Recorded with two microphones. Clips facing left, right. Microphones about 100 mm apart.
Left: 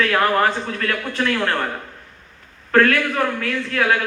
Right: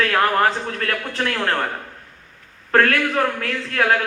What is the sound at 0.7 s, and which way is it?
Speech, 45° right (ahead or behind).